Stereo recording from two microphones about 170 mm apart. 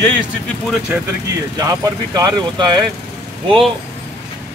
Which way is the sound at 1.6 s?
20° right (ahead or behind).